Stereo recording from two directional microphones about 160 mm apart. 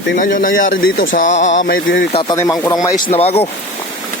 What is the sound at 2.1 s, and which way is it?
Speech, 30° left (ahead or behind).